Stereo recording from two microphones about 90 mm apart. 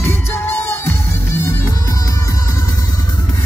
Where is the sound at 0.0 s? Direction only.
25° left (ahead or behind).